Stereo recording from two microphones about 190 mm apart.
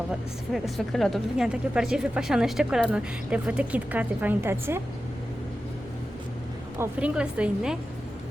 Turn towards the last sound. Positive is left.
turn(degrees=-5)  # may be behind; listen again after turning